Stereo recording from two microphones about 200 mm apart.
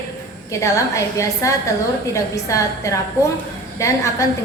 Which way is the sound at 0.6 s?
15° left (ahead or behind).